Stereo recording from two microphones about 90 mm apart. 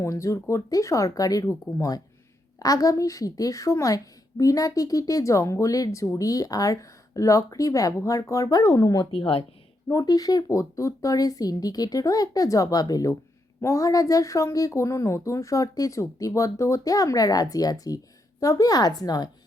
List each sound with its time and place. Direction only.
0.0 s speech: 35° left (ahead or behind)
9.1 s speech: 90° left
9.9 s speech: 40° left (ahead or behind)